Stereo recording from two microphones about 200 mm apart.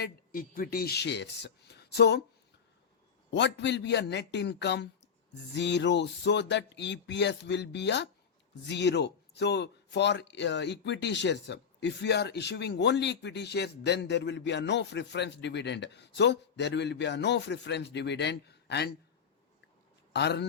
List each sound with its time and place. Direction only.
0.0 s speech: 45° left (ahead or behind)
3.3 s speech: 60° left (ahead or behind)
20.1 s speech: 55° left (ahead or behind)